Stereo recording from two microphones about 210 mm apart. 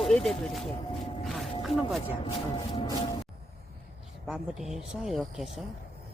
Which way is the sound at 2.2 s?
25° left (ahead or behind).